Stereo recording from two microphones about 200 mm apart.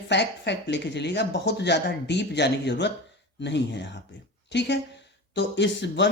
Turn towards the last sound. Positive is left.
turn(degrees=60)  # may be behind; listen again after turning